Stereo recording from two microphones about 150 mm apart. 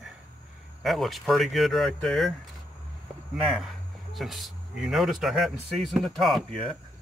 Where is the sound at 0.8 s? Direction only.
Centre (ahead or behind).